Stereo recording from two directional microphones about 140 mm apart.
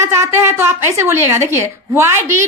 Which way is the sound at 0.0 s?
20° right (ahead or behind).